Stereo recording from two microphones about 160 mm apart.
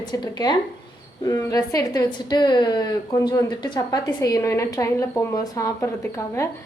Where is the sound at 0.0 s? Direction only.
25° left (ahead or behind).